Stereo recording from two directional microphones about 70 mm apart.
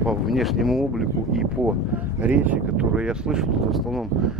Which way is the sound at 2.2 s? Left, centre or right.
Right.